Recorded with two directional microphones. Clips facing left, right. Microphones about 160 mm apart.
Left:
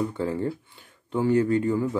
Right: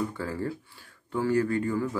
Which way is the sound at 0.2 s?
25° left (ahead or behind).